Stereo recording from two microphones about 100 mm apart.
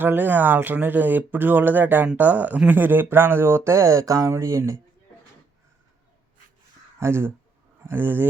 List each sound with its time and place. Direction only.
0.0 s speech: 20° right (ahead or behind)
7.0 s speech: 25° right (ahead or behind)